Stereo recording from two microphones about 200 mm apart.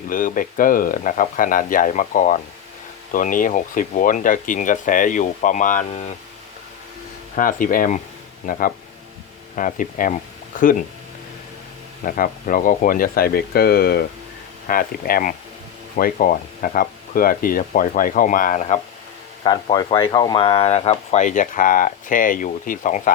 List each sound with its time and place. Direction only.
0.1 s speech: 40° left (ahead or behind)
7.3 s speech: 45° left (ahead or behind)
12.0 s speech: 45° left (ahead or behind)
19.5 s speech: 20° left (ahead or behind); by 23.1 s 40° left (ahead or behind)